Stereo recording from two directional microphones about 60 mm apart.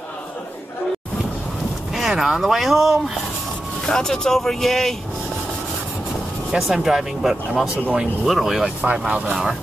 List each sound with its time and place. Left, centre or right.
2.0 s speech: centre
3.8 s speech: centre
6.5 s speech: centre
8.9 s speech: centre